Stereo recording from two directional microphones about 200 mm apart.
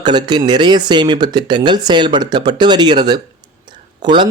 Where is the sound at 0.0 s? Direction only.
20° right (ahead or behind).